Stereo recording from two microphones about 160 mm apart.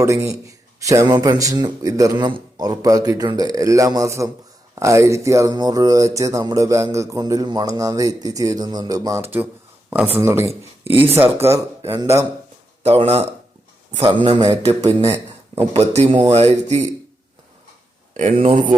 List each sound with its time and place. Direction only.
0.0 s a sound: 20° right (ahead or behind)
10.2 s speech: 15° right (ahead or behind)
12.8 s speech: 40° right (ahead or behind)
14.2 s a sound: 30° right (ahead or behind); by 15.6 s 15° right (ahead or behind)
15.7 s speech: 40° right (ahead or behind)
16.0 s speech: 30° right (ahead or behind)
18.1 s speech: 50° right (ahead or behind)